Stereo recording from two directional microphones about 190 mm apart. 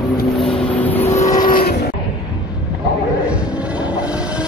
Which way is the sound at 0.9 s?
15° left (ahead or behind).